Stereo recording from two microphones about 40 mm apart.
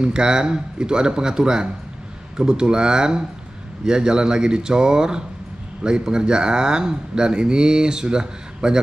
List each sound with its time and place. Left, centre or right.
0.0 s speech: right